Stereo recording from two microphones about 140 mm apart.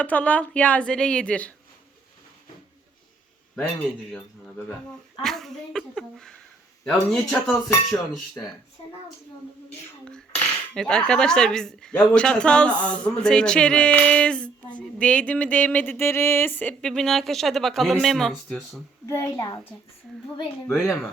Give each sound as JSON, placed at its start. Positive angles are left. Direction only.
{"t": 0.0, "sound": "cutlery", "side_deg": 10}
{"t": 4.1, "sound": "cutlery", "side_deg": 10}
{"t": 5.2, "sound": "a woman's voice", "side_deg": 0}
{"t": 10.1, "sound": "cutlery", "side_deg": 5}
{"t": 19.0, "sound": "a child's voice", "side_deg": 20}
{"t": 20.7, "sound": "a woman's voice", "side_deg": 5}